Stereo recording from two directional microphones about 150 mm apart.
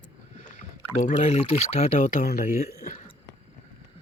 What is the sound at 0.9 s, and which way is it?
Speech, 50° left (ahead or behind).